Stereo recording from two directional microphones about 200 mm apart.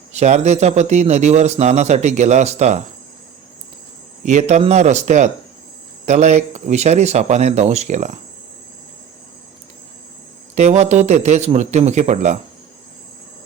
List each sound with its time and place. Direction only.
0.2 s a man's voice: 35° right (ahead or behind)
4.2 s a man's voice: 35° right (ahead or behind)
10.5 s a man's voice: 35° right (ahead or behind)